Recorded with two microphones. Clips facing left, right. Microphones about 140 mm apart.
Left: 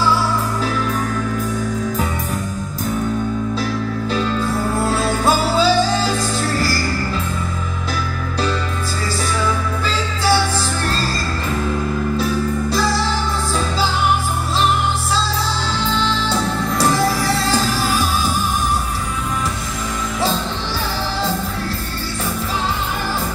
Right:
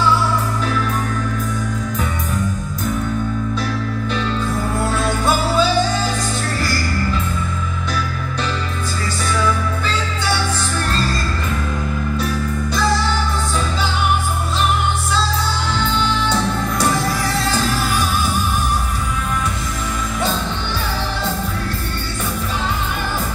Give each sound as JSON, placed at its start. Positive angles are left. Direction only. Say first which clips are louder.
{"t": 4.9, "sound": "music", "louder": "left 1 dB", "side_deg": 35}
{"t": 12.2, "sound": "music", "louder": "left 3 dB", "side_deg": 35}